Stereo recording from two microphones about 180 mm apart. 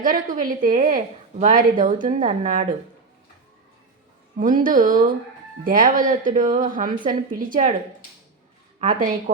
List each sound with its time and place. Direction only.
0.0 s a woman's voice: 50° right (ahead or behind)
4.6 s a woman's voice: 50° right (ahead or behind)
9.0 s a woman's voice: 50° right (ahead or behind)